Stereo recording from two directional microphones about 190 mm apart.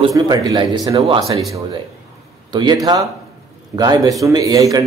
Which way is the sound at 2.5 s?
20° right (ahead or behind).